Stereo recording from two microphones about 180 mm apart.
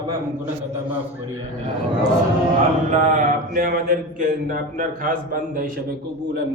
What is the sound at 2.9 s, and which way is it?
Speech, 45° right (ahead or behind).